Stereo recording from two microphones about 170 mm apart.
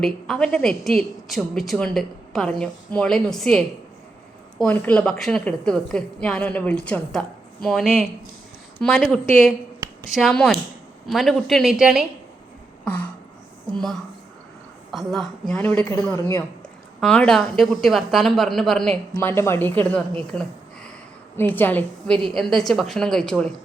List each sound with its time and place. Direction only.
0.0 s a woman's voice: 5° left (ahead or behind)
4.6 s a woman's voice: 5° left (ahead or behind)
9.8 s a sound: 25° right (ahead or behind)
10.2 s a woman's voice: 5° left (ahead or behind)
12.8 s a sound: 10° left (ahead or behind)
14.9 s a woman's voice: centre (ahead or behind)
19.1 s a woman's voice: 15° left (ahead or behind)